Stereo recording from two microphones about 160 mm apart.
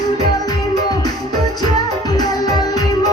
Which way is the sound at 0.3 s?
25° left (ahead or behind).